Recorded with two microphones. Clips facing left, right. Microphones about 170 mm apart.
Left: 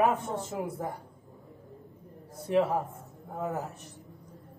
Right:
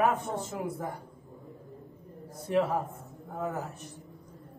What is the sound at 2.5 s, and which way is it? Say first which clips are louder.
Speech: left 1 dB; 20° left (ahead or behind).